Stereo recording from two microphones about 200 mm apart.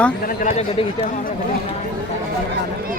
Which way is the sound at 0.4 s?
30° left (ahead or behind).